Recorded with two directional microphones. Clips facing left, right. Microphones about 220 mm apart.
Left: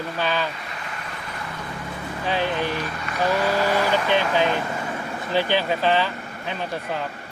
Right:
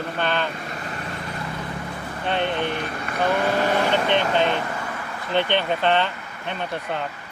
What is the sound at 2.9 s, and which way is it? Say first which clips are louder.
Speech: even; 50° right (ahead or behind).